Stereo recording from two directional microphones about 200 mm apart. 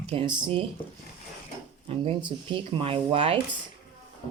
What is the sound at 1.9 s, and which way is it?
Speech, 25° right (ahead or behind).